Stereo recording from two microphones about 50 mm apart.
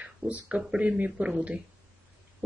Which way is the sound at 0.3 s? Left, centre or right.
Centre.